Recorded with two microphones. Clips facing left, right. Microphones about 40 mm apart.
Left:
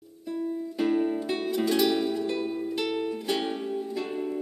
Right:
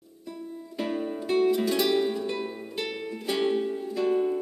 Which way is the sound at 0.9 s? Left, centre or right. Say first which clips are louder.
Even; centre.